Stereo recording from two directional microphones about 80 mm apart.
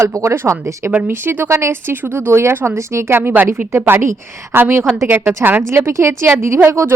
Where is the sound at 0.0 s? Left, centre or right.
Right.